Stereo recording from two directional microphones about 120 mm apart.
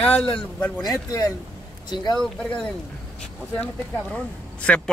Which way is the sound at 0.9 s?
25° left (ahead or behind).